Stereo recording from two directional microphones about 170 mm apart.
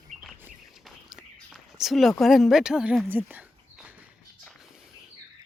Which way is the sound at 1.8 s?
Centre (ahead or behind).